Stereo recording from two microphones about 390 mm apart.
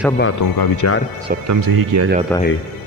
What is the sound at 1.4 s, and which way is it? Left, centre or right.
Speech, right.